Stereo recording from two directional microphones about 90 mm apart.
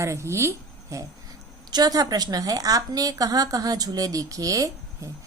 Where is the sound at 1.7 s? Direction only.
45° right (ahead or behind).